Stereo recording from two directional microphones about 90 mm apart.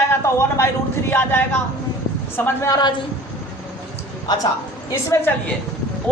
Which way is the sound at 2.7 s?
50° left (ahead or behind).